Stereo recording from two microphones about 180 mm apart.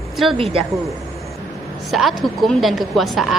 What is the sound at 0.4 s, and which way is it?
Speech, 30° right (ahead or behind).